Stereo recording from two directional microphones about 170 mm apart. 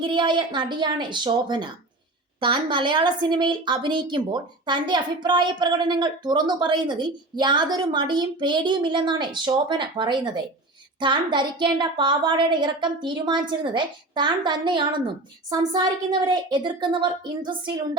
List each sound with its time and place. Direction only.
0.0 s a woman's voice: 30° right (ahead or behind)